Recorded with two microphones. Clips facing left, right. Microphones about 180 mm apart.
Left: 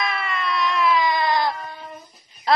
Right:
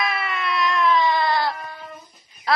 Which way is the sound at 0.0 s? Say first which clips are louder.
Even; 5° right (ahead or behind).